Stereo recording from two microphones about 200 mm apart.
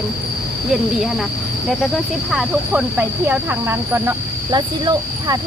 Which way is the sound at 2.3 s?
5° right (ahead or behind).